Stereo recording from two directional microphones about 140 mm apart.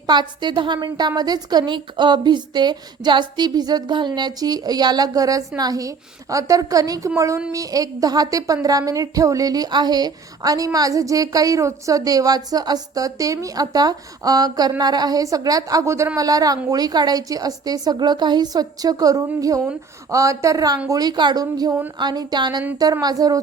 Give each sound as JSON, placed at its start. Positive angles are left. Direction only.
{"t": 0.1, "sound": "a woman's voice", "side_deg": -30}